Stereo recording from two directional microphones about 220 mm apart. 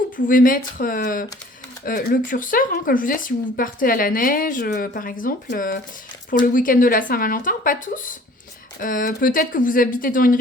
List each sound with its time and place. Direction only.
0.3 s speech: 40° left (ahead or behind)